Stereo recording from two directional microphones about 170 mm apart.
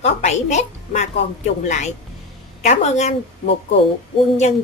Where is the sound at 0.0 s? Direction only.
40° left (ahead or behind).